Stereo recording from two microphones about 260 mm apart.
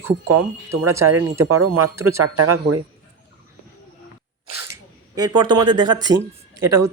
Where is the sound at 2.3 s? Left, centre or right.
Right.